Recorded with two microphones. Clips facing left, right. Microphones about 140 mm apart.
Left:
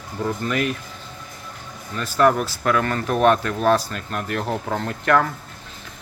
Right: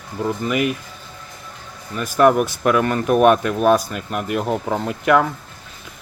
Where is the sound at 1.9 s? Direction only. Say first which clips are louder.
Right 3 dB; 15° right (ahead or behind).